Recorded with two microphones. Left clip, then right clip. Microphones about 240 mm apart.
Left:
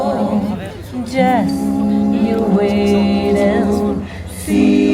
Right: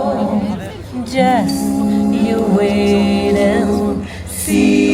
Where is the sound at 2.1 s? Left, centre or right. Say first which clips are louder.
Right 1 dB; centre.